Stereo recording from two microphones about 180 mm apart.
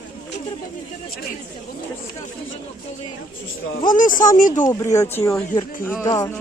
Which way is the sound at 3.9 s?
50° left (ahead or behind).